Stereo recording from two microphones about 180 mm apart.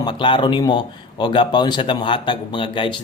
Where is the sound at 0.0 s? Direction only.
25° left (ahead or behind).